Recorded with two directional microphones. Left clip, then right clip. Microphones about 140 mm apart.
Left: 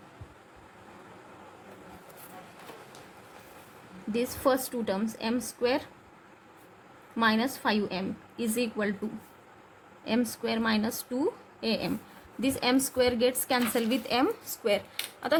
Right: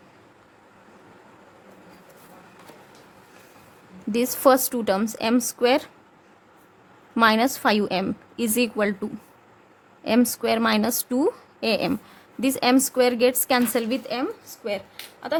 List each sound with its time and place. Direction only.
4.1 s a woman's voice: 75° right (ahead or behind)
7.2 s a woman's voice: 75° right (ahead or behind)
10.0 s a woman's voice: 70° right (ahead or behind)
12.4 s a woman's voice: 50° right (ahead or behind)
14.0 s speech: 10° right (ahead or behind)
14.3 s speech: 5° left (ahead or behind)